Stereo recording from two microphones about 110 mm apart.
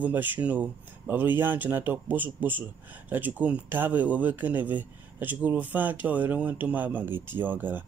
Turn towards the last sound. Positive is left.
turn(degrees=-15)  # may be behind; listen again after turning